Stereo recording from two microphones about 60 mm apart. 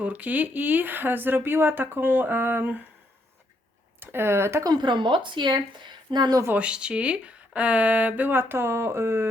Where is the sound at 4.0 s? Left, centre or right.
Right.